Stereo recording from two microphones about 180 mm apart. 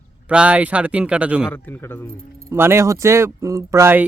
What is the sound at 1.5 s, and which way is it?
Speech, 10° left (ahead or behind).